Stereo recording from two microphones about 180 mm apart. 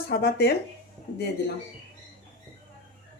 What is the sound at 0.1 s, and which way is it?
Speech, 60° left (ahead or behind).